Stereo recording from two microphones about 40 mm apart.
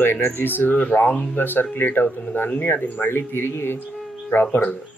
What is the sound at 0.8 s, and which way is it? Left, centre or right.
Speech, left.